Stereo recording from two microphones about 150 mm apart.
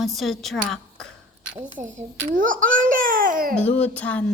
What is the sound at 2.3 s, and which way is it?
Laughter, 60° right (ahead or behind).